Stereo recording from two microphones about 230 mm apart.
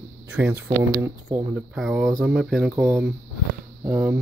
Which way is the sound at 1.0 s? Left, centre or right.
Centre.